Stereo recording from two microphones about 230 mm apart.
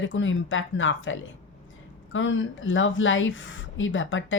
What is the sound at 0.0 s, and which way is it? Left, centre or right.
A woman's voice, left.